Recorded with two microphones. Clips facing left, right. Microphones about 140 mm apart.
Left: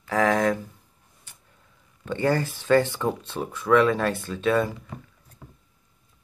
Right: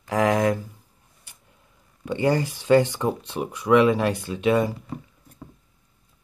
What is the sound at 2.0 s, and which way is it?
Speech, 15° right (ahead or behind).